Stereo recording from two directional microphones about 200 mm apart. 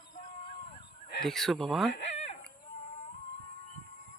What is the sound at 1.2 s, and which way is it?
Speech, centre (ahead or behind).